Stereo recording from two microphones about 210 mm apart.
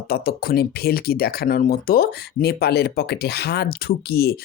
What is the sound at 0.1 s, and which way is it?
Speech, 45° left (ahead or behind).